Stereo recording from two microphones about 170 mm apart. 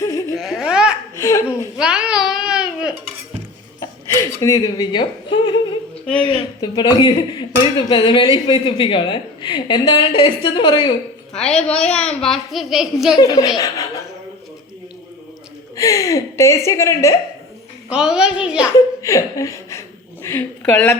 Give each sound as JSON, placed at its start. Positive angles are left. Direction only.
{"t": 0.0, "sound": "baby laughter", "side_deg": 20}
{"t": 0.3, "sound": "baby laughter", "side_deg": 0}
{"t": 1.1, "sound": "laughter", "side_deg": 20}
{"t": 1.8, "sound": "babbling", "side_deg": -5}
{"t": 4.2, "sound": "speech", "side_deg": 20}
{"t": 11.3, "sound": "a woman's voice", "side_deg": 5}
{"t": 13.1, "sound": "speech", "side_deg": 25}
{"t": 15.7, "sound": "a woman's voice", "side_deg": 20}
{"t": 17.8, "sound": "a woman's voice", "side_deg": -5}
{"t": 19.0, "sound": "a woman's voice", "side_deg": 20}